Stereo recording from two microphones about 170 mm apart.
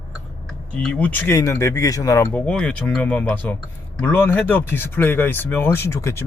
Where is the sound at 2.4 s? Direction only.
5° left (ahead or behind).